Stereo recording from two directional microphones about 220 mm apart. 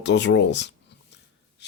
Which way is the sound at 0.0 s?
55° left (ahead or behind).